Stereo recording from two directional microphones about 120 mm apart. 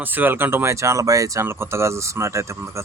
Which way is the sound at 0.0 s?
15° right (ahead or behind).